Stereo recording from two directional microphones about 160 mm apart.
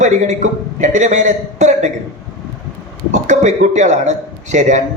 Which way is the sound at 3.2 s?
50° right (ahead or behind).